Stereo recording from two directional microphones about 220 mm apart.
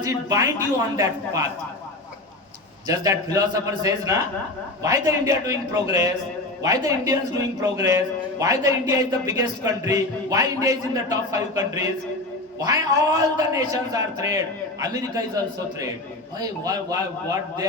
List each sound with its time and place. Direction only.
0.0 s a man's voice: 15° right (ahead or behind)
2.8 s a man's voice: 15° right (ahead or behind)
16.4 s a man's voice: 15° right (ahead or behind)